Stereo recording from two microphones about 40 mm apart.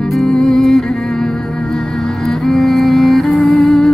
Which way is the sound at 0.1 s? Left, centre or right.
Centre.